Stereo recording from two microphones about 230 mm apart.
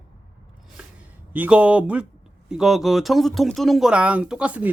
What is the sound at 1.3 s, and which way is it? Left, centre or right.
Speech, centre.